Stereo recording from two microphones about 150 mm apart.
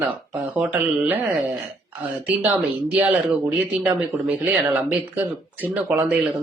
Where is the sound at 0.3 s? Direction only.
5° right (ahead or behind).